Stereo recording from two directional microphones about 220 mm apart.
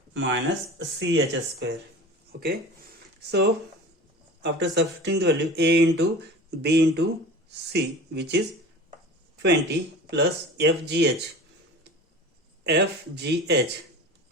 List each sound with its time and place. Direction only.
0.1 s speech: 55° right (ahead or behind)
9.4 s speech: 50° right (ahead or behind)
12.6 s speech: 50° right (ahead or behind)